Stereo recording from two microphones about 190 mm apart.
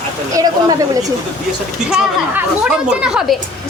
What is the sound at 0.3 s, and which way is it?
Speech, 20° right (ahead or behind).